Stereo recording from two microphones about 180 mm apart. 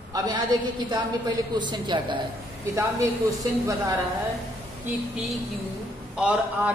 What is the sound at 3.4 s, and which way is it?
Speech, 15° right (ahead or behind).